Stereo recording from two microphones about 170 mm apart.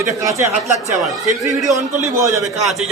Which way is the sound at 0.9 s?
Centre (ahead or behind).